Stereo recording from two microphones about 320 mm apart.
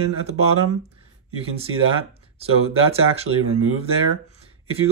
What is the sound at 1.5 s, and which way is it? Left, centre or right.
Speech, centre.